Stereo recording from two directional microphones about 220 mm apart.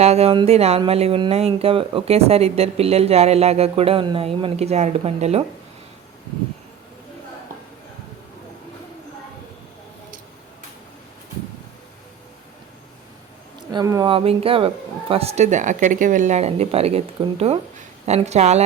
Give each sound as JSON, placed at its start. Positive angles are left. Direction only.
{"t": 0.0, "sound": "speech", "side_deg": -30}
{"t": 13.6, "sound": "speech", "side_deg": -20}